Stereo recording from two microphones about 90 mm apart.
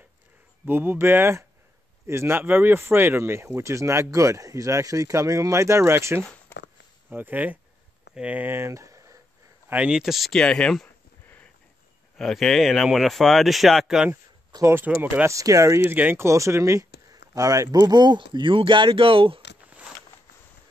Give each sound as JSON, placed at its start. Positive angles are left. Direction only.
{"t": 0.7, "sound": "speech", "side_deg": -25}
{"t": 9.7, "sound": "speech", "side_deg": -10}
{"t": 12.2, "sound": "speech", "side_deg": 5}
{"t": 14.7, "sound": "speech", "side_deg": -25}
{"t": 15.2, "sound": "speech", "side_deg": -35}
{"t": 15.8, "sound": "speech", "side_deg": -20}